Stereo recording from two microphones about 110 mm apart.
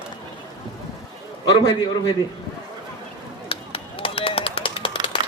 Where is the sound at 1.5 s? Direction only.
40° left (ahead or behind).